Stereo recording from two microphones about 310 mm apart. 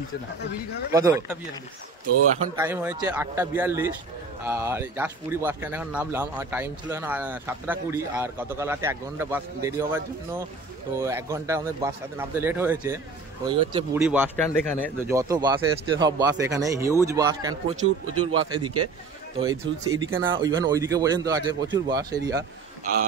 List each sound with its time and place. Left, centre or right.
0.9 s speech: centre
2.5 s speech: centre
14.0 s speech: centre
15.0 s speech: centre
17.8 s speech: right
19.4 s speech: centre